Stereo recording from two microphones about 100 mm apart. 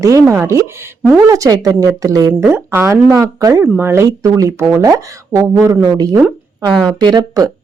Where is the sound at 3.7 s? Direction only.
25° right (ahead or behind).